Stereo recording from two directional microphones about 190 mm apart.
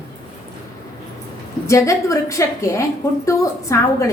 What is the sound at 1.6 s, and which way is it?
A woman's voice, 15° left (ahead or behind).